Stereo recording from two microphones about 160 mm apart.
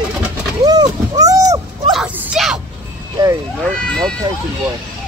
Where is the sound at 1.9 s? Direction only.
Centre (ahead or behind).